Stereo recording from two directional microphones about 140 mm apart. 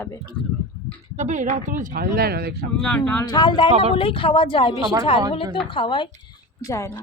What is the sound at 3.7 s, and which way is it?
Speech, 45° right (ahead or behind).